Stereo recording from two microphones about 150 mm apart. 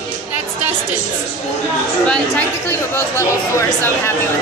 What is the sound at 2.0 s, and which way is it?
Speech, 5° left (ahead or behind).